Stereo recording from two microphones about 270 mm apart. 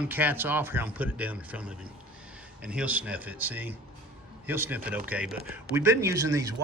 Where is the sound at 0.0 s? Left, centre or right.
Centre.